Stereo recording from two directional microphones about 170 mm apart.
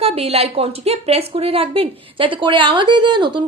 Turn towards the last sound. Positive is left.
turn(degrees=-25)  # may be behind; listen again after turning